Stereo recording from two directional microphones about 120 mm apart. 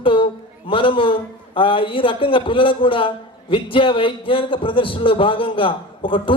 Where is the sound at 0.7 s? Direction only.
45° left (ahead or behind).